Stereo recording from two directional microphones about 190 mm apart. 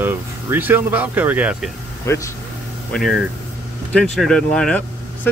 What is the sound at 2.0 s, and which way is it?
Speech, 15° left (ahead or behind).